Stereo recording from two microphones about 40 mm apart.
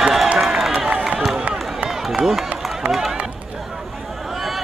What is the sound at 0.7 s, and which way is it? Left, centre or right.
Run, right.